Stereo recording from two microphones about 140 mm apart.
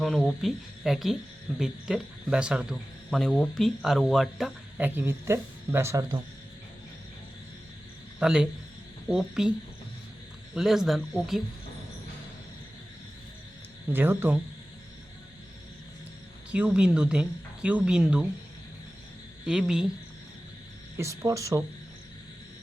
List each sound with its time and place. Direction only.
0.0 s speech: centre (ahead or behind)
4.8 s speech: 15° right (ahead or behind)
8.2 s speech: 5° right (ahead or behind)
10.5 s speech: centre (ahead or behind)
13.9 s speech: 15° right (ahead or behind)
16.5 s speech: 10° right (ahead or behind)
19.5 s speech: 5° right (ahead or behind)
21.0 s speech: 20° right (ahead or behind)